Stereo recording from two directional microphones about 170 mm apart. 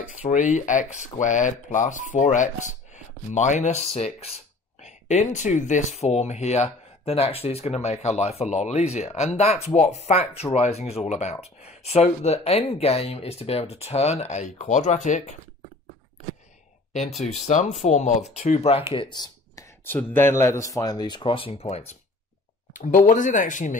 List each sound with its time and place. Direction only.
0.2 s speech: 45° left (ahead or behind)
17.5 s speech: 45° left (ahead or behind)
22.7 s speech: 50° left (ahead or behind)